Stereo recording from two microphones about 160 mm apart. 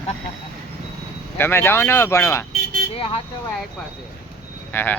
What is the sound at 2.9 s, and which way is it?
Speech, 35° left (ahead or behind).